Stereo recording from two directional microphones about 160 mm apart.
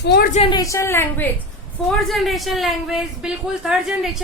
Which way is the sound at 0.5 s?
20° left (ahead or behind).